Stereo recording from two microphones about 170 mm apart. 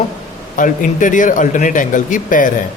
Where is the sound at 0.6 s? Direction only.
50° left (ahead or behind).